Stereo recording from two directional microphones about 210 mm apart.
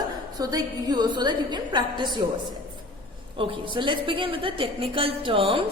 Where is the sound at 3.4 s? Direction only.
25° right (ahead or behind).